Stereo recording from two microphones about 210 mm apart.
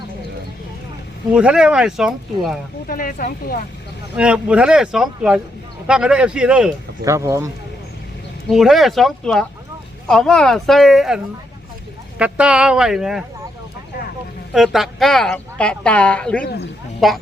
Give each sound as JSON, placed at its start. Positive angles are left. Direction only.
{"t": 1.3, "sound": "speech", "side_deg": -5}
{"t": 2.9, "sound": "speech", "side_deg": 40}
{"t": 4.2, "sound": "speech", "side_deg": -5}
{"t": 8.4, "sound": "speech", "side_deg": 0}
{"t": 12.2, "sound": "speech", "side_deg": -5}
{"t": 14.5, "sound": "speech", "side_deg": 0}